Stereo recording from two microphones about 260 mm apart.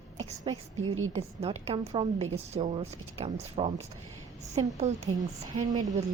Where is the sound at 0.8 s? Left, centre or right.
Right.